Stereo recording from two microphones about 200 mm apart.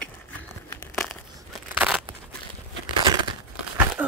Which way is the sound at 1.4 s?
5° right (ahead or behind).